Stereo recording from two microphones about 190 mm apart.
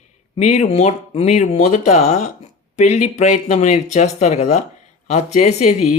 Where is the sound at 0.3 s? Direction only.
35° left (ahead or behind).